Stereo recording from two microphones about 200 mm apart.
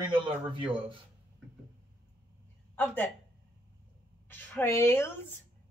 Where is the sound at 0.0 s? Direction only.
25° right (ahead or behind).